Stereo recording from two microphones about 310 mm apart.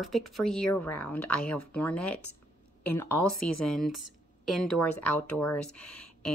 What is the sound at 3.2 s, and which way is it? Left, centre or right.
Speech, left.